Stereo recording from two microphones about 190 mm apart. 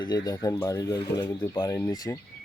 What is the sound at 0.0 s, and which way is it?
Speech, 20° left (ahead or behind).